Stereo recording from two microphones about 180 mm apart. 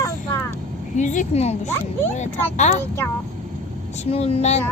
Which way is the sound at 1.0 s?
40° left (ahead or behind).